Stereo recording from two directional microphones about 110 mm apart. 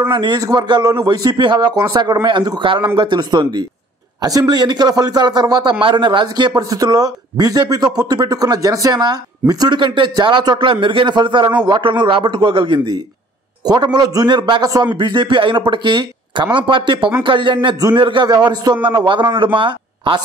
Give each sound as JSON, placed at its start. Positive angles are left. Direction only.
{"t": 0.0, "sound": "a man's voice", "side_deg": -40}
{"t": 15.0, "sound": "a man's voice", "side_deg": -45}
{"t": 18.3, "sound": "a man's voice", "side_deg": -35}